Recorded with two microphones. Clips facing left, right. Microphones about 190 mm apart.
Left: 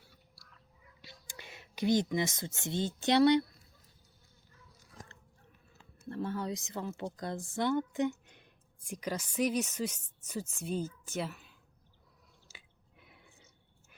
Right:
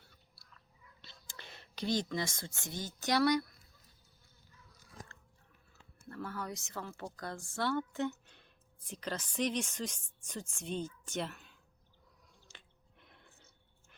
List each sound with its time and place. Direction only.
1.0 s speech: 15° left (ahead or behind)
6.1 s speech: 25° left (ahead or behind); by 11.5 s 5° left (ahead or behind)
12.5 s drip: 5° left (ahead or behind)